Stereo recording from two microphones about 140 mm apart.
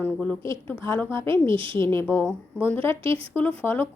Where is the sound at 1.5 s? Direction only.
40° right (ahead or behind).